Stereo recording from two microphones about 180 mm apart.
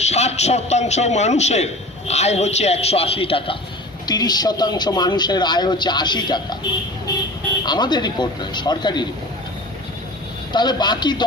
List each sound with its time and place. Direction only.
0.0 s a man's voice: 40° left (ahead or behind)
7.6 s a man's voice: 25° left (ahead or behind)
10.5 s a man's voice: 25° left (ahead or behind)